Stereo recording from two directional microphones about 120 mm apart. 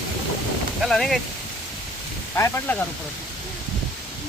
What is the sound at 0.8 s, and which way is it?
Speech, 5° left (ahead or behind).